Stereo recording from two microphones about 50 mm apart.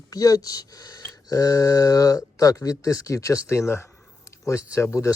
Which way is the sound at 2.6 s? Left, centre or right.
Left.